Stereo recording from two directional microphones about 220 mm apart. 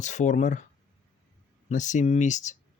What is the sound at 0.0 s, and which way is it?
Speech, 35° left (ahead or behind).